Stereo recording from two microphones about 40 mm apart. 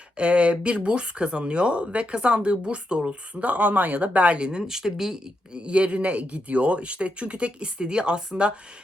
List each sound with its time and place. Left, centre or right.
0.2 s speech: right
4.6 s speech: centre
5.5 s speech: right